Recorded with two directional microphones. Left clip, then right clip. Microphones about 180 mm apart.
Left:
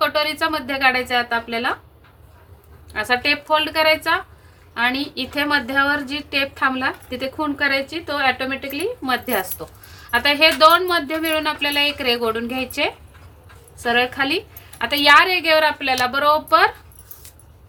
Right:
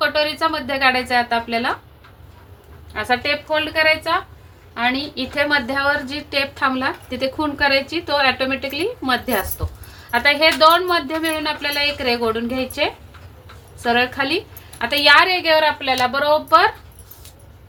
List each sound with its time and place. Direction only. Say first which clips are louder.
0.0 s a woman's voice: right 1 dB; 15° left (ahead or behind)
2.9 s speech: left 1 dB; 30° left (ahead or behind)
4.7 s a woman's voice: even; 25° left (ahead or behind)